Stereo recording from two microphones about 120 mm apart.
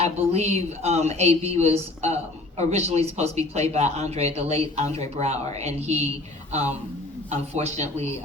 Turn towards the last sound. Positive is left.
turn(degrees=-70)  # may be behind; listen again after turning